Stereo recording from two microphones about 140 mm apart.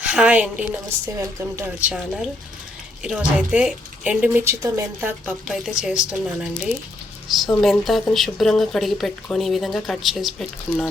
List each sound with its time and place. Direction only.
0.0 s a woman's voice: 10° right (ahead or behind)
0.9 s speech: 20° right (ahead or behind)
1.8 s speech: 5° right (ahead or behind)
5.5 s speech: 5° right (ahead or behind)